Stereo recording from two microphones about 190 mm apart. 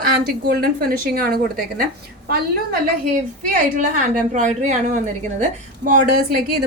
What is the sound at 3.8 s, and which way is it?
A woman's voice, 40° right (ahead or behind).